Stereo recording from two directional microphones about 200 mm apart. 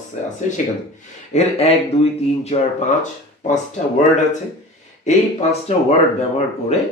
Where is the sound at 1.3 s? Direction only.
30° left (ahead or behind).